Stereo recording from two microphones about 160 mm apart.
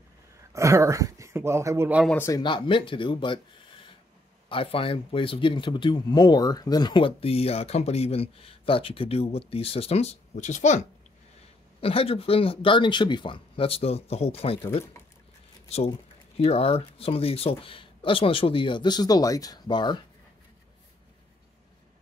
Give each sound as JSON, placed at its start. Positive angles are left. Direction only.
{"t": 0.5, "sound": "speech", "side_deg": -20}
{"t": 2.0, "sound": "speech", "side_deg": 15}
{"t": 2.4, "sound": "speech", "side_deg": 30}
{"t": 11.8, "sound": "speech", "side_deg": 35}
{"t": 16.3, "sound": "speech", "side_deg": 40}